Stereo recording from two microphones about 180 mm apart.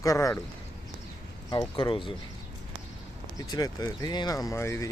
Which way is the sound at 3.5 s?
20° left (ahead or behind).